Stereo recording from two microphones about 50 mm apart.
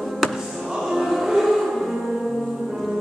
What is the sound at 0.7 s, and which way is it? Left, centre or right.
Music, centre.